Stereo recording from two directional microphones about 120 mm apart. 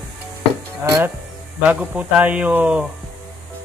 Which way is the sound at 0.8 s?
25° right (ahead or behind).